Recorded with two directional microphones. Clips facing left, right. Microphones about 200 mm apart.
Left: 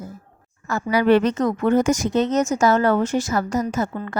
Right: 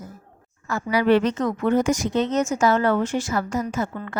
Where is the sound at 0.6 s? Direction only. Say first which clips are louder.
Left 2 dB; 45° left (ahead or behind).